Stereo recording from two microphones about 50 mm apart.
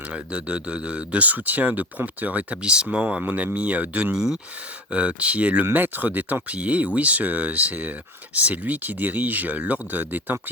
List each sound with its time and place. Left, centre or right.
0.1 s speech: right
2.6 s speech: centre
4.1 s speech: centre
4.9 s speech: right